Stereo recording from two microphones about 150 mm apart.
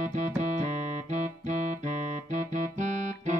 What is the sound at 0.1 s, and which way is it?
Music, 50° right (ahead or behind).